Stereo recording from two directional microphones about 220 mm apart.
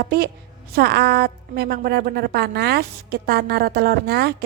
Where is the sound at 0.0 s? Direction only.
45° right (ahead or behind).